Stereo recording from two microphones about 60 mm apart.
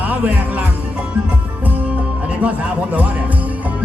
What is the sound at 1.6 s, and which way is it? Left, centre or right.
Music, right.